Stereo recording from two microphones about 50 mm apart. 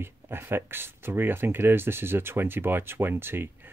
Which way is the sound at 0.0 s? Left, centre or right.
Right.